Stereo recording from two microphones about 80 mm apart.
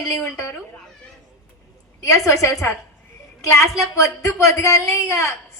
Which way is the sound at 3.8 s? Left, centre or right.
Left.